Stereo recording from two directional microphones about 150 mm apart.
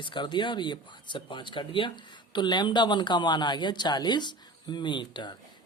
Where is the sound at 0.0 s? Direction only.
30° left (ahead or behind).